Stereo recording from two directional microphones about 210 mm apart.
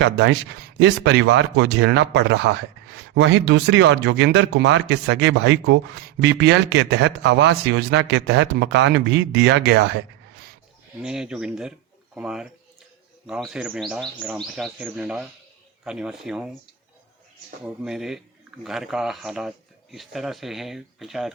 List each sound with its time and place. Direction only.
0.0 s a man's voice: 55° right (ahead or behind)
11.0 s speech: 5° right (ahead or behind)
17.8 s speech: centre (ahead or behind)